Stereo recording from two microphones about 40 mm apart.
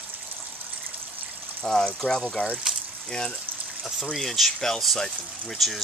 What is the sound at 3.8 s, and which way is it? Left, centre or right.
Speech, centre.